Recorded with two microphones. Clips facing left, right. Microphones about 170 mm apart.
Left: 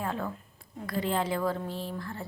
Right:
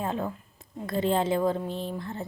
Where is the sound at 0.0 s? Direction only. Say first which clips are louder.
Right 3 dB; 20° right (ahead or behind).